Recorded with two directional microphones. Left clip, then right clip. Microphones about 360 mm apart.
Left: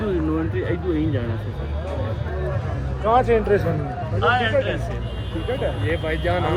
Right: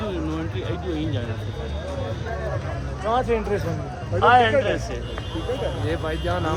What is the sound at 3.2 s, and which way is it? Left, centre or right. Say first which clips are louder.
Speech: left 5 dB; left.